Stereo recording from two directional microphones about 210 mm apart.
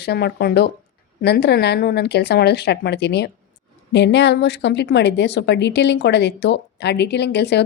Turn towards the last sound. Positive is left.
turn(degrees=50)  # may be behind; listen again after turning